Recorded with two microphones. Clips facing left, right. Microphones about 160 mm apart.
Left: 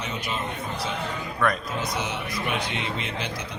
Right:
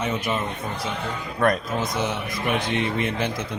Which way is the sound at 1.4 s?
50° right (ahead or behind).